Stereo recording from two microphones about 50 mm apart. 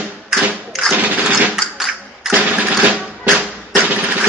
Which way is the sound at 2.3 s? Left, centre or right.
Right.